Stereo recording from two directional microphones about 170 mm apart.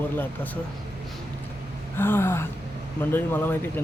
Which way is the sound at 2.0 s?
15° left (ahead or behind).